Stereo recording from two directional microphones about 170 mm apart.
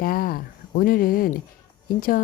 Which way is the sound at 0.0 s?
55° left (ahead or behind).